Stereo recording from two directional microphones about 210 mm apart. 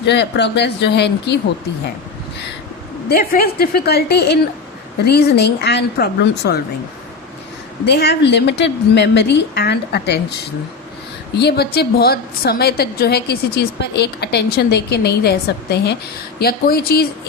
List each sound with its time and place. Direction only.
0.0 s a woman's voice: 55° left (ahead or behind)
3.1 s a woman's voice: 45° left (ahead or behind)
7.9 s a woman's voice: 50° left (ahead or behind)
11.3 s a woman's voice: 50° left (ahead or behind)